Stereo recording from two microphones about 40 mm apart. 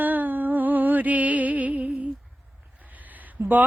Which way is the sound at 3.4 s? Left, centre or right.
Right.